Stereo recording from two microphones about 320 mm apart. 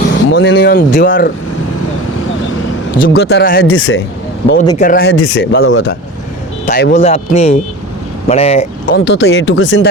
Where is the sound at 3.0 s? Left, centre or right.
Left.